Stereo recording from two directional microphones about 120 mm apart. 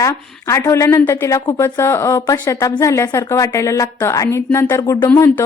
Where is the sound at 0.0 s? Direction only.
25° left (ahead or behind).